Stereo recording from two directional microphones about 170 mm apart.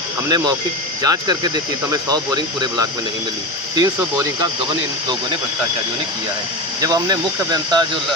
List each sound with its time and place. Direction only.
0.3 s speech: 25° right (ahead or behind)
6.8 s speech: 20° right (ahead or behind)